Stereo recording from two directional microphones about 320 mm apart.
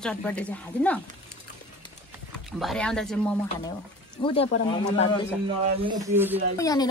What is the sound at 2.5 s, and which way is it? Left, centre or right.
Speech, centre.